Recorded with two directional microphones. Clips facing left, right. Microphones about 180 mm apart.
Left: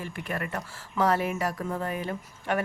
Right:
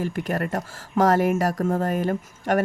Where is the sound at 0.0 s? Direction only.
45° right (ahead or behind).